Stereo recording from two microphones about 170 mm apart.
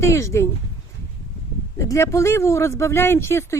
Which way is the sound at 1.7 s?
15° left (ahead or behind).